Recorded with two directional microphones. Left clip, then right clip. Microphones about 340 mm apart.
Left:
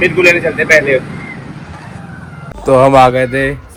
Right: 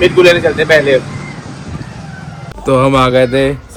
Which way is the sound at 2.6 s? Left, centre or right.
Centre.